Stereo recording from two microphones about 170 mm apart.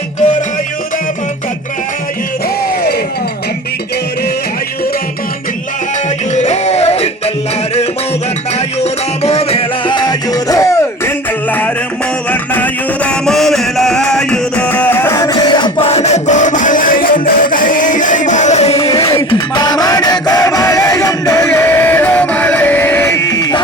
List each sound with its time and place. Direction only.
6.3 s a sound: 40° left (ahead or behind)
8.5 s music: 40° left (ahead or behind); by 11.1 s 15° left (ahead or behind)
12.3 s music: 10° left (ahead or behind)